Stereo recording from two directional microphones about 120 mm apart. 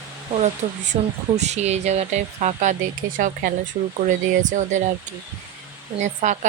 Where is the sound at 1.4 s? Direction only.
70° right (ahead or behind); by 3.3 s 90° right.